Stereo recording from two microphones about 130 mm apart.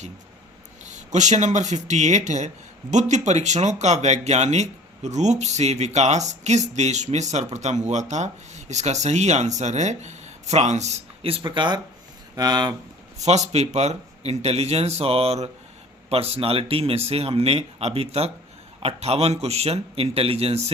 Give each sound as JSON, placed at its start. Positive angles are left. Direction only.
{"t": 0.9, "sound": "speech", "side_deg": -65}
{"t": 13.2, "sound": "speech", "side_deg": -60}